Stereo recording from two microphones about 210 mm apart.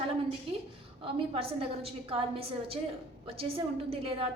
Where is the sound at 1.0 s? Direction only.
25° right (ahead or behind).